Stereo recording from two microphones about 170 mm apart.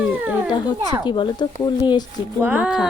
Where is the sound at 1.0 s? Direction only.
25° left (ahead or behind).